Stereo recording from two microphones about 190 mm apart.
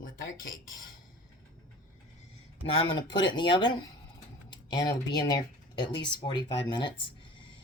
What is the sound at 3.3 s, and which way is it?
Speech, 25° left (ahead or behind).